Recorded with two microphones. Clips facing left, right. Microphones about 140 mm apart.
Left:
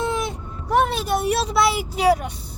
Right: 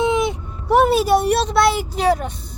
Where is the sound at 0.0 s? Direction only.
20° right (ahead or behind).